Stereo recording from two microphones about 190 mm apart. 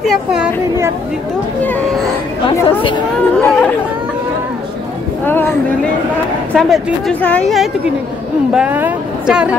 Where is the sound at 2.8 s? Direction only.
25° left (ahead or behind).